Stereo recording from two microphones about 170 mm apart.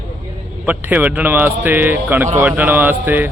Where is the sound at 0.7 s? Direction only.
10° right (ahead or behind).